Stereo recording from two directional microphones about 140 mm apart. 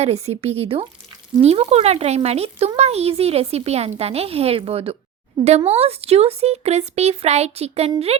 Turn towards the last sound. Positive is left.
turn(degrees=-45)  # may be behind; listen again after turning